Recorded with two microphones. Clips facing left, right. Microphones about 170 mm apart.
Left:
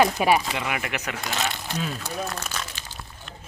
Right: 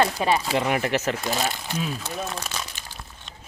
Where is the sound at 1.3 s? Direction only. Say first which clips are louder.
Right 2 dB; 5° right (ahead or behind).